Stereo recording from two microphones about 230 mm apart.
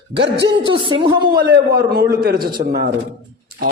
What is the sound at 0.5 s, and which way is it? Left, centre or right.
Speech, right.